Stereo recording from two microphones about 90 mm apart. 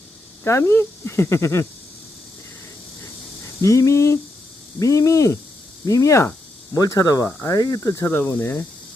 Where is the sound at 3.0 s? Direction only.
35° left (ahead or behind).